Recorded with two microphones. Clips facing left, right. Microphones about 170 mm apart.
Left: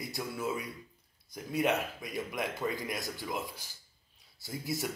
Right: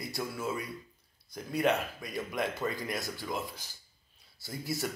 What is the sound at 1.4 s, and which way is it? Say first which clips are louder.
Speech: right 1 dB; 10° left (ahead or behind).